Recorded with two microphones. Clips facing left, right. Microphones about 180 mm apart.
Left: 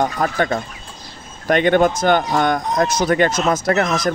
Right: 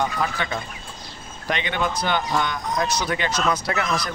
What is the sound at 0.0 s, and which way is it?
Speech, 50° left (ahead or behind).